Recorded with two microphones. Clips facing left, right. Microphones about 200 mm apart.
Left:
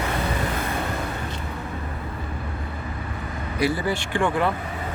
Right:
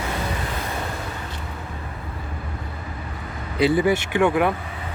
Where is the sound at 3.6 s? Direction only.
20° right (ahead or behind).